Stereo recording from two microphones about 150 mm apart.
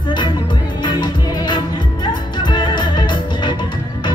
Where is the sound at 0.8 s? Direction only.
30° left (ahead or behind).